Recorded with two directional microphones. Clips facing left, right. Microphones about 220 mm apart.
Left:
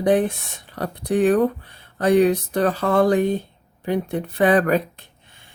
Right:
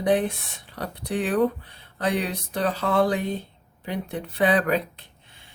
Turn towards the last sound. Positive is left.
turn(degrees=50)  # may be behind; listen again after turning